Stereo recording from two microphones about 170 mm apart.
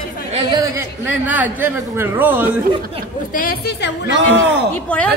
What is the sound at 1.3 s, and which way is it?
Speech, 10° right (ahead or behind).